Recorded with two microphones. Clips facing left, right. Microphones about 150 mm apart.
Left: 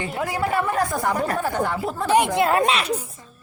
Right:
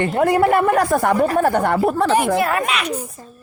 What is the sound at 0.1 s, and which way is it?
A woman's voice, 60° right (ahead or behind).